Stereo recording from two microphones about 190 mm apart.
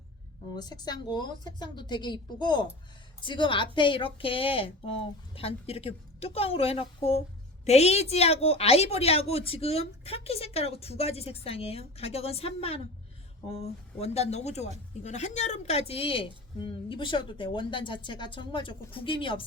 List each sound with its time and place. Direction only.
0.5 s a woman's voice: 20° left (ahead or behind)